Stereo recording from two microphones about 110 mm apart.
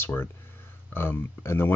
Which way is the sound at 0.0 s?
20° left (ahead or behind).